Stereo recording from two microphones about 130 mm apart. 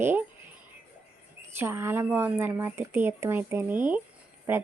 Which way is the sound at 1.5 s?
20° right (ahead or behind).